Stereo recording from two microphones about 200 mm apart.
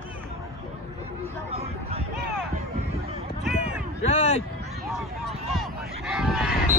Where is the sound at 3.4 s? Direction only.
5° right (ahead or behind).